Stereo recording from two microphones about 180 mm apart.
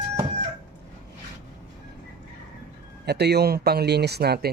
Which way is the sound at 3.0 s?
65° right (ahead or behind).